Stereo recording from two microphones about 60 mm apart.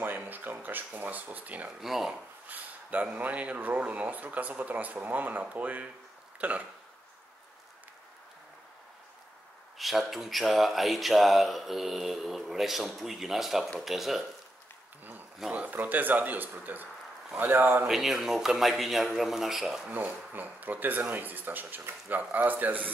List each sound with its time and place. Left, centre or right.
0.0 s a sound: right
1.8 s speech: centre
2.4 s speech: right
9.8 s speech: centre
15.5 s speech: right
17.8 s speech: centre
19.9 s speech: right